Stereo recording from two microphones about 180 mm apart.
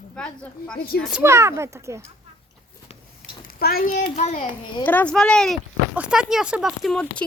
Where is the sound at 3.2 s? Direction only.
55° left (ahead or behind).